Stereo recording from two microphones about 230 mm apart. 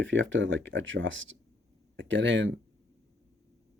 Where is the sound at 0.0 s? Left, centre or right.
Right.